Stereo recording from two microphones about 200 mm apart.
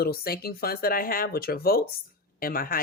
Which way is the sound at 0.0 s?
50° left (ahead or behind).